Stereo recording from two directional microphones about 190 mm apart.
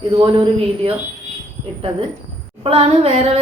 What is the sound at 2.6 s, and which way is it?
Speech, 30° right (ahead or behind).